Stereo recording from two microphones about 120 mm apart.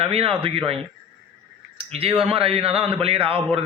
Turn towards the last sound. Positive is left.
turn(degrees=-50)  # may be behind; listen again after turning